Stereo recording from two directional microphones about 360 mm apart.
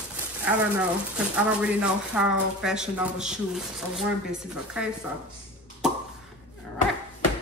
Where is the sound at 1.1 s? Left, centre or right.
Centre.